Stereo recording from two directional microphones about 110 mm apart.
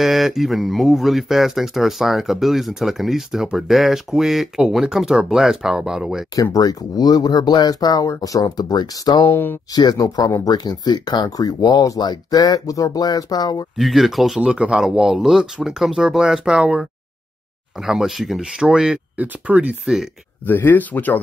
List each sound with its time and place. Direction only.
0.0 s speech: centre (ahead or behind)
6.3 s speech: 35° left (ahead or behind)
9.3 s speech: 20° left (ahead or behind)
9.8 s speech: 35° left (ahead or behind)
13.7 s speech: centre (ahead or behind)
17.8 s speech: 5° right (ahead or behind)
20.4 s speech: 15° left (ahead or behind)